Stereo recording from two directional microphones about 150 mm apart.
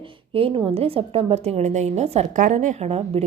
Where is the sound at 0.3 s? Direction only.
40° right (ahead or behind).